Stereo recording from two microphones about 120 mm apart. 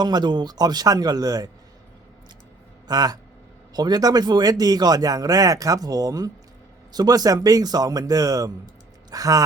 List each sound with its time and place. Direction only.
0.0 s speech: 35° right (ahead or behind)
2.8 s a man's voice: 35° right (ahead or behind)